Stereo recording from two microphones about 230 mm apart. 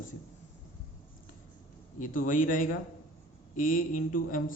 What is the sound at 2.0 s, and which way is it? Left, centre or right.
Speech, left.